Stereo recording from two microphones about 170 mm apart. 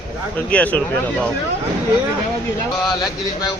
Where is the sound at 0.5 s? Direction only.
10° left (ahead or behind).